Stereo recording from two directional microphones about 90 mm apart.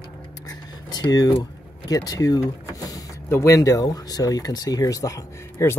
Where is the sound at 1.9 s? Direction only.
45° left (ahead or behind).